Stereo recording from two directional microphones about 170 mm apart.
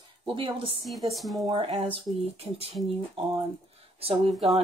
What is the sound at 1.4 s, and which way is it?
Speech, 30° right (ahead or behind).